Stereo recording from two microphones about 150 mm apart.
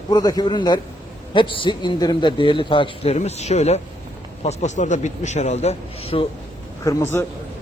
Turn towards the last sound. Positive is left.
turn(degrees=15)  # may be behind; listen again after turning